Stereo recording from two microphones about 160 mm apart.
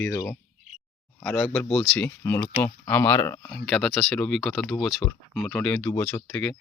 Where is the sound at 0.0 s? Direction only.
15° left (ahead or behind).